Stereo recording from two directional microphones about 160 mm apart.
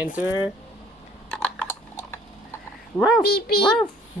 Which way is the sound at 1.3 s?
5° left (ahead or behind).